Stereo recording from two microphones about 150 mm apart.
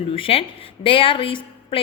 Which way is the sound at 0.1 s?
40° left (ahead or behind).